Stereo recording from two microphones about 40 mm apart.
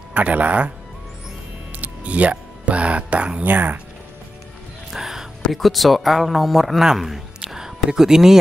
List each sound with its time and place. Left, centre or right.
0.1 s speech: right
1.8 s speech: right
3.4 s speech: right
4.9 s a sound: centre
5.5 s a man's voice: centre